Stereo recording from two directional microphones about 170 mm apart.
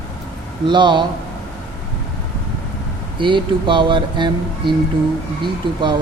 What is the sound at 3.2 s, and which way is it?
Speech, 30° right (ahead or behind).